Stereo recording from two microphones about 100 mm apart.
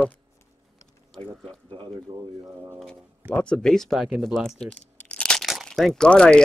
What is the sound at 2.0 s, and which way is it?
Speech, 30° right (ahead or behind).